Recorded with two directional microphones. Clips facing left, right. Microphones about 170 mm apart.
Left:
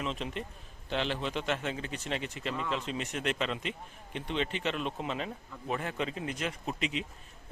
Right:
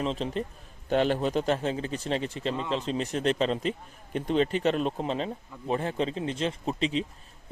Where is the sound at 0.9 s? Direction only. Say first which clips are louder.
Right 8 dB; 45° right (ahead or behind).